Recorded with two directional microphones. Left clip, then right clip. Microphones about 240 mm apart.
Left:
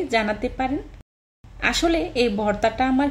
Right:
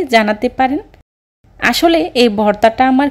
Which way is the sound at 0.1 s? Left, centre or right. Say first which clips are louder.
Right 12 dB; right.